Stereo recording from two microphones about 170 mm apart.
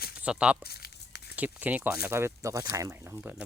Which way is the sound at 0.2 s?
5° right (ahead or behind).